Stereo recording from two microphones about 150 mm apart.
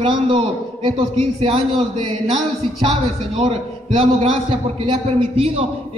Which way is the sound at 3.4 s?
40° right (ahead or behind).